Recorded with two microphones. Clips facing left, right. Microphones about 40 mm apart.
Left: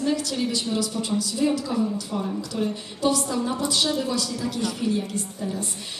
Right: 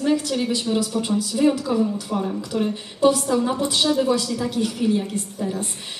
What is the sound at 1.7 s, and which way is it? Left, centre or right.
A woman's voice, centre.